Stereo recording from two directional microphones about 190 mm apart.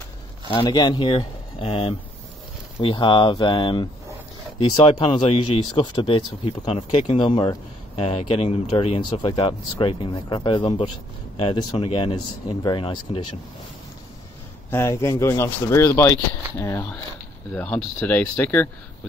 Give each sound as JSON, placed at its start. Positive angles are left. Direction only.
{"t": 0.5, "sound": "speech", "side_deg": 25}
{"t": 14.7, "sound": "speech", "side_deg": 15}